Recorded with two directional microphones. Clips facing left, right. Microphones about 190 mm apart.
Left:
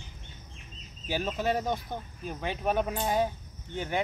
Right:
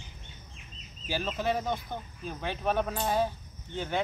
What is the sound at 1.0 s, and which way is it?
Speech, 15° left (ahead or behind).